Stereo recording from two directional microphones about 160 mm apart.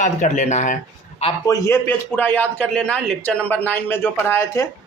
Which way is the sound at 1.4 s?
20° left (ahead or behind).